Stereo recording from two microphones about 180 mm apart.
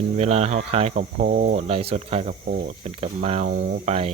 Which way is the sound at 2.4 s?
50° right (ahead or behind).